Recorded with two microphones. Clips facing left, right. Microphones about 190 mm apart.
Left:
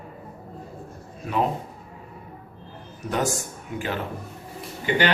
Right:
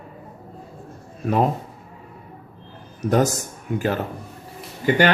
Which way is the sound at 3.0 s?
40° right (ahead or behind).